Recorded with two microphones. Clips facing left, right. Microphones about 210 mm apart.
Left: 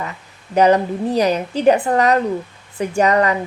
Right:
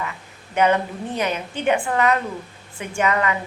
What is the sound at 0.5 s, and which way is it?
A woman's voice, 35° left (ahead or behind).